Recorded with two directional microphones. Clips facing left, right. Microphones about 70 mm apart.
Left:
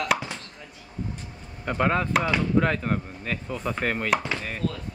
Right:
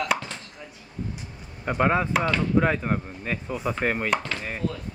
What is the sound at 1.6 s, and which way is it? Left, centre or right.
Speech, centre.